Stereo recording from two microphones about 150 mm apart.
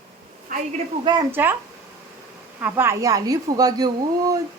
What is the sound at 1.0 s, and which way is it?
Speech, 30° right (ahead or behind).